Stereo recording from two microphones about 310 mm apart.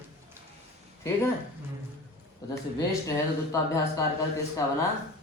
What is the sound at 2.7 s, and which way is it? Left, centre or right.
Speech, centre.